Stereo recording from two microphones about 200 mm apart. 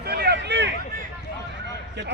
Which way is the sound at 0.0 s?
50° right (ahead or behind).